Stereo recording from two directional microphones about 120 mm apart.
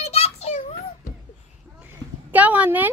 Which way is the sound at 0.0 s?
60° left (ahead or behind).